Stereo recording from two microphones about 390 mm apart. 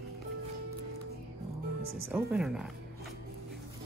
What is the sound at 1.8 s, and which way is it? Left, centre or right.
Music, right.